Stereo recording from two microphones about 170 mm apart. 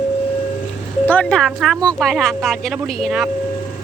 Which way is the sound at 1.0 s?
5° left (ahead or behind).